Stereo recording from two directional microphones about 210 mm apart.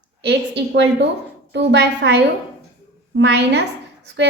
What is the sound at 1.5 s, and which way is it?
A woman's voice, 55° right (ahead or behind).